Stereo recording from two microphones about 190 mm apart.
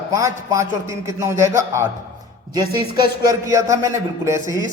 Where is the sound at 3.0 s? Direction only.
20° right (ahead or behind).